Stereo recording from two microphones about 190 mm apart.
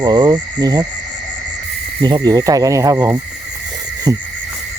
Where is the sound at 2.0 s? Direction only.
20° right (ahead or behind).